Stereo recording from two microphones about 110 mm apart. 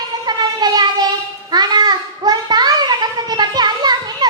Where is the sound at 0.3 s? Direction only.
40° right (ahead or behind).